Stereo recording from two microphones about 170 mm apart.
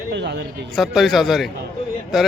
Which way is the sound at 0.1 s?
90° right.